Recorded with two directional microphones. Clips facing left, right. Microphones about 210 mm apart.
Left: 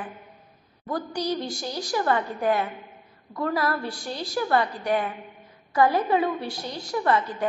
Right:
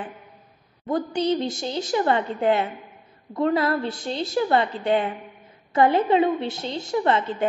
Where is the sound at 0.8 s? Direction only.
25° right (ahead or behind).